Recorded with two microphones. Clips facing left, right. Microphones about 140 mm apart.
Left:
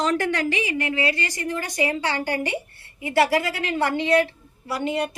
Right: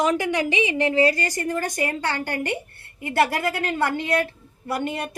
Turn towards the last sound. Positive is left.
turn(degrees=-50)  # may be behind; listen again after turning